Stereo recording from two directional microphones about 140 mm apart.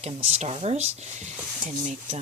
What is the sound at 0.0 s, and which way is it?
Speech, 50° right (ahead or behind).